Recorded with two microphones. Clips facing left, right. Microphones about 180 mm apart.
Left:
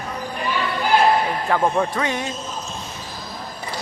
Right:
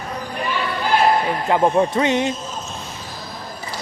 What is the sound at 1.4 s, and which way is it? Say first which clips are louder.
Speech: right 5 dB; 20° right (ahead or behind).